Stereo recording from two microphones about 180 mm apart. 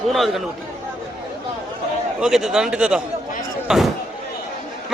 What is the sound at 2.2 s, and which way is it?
A man's voice, centre (ahead or behind).